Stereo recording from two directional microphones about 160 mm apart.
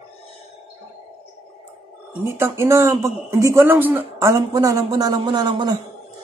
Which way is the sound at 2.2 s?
15° right (ahead or behind).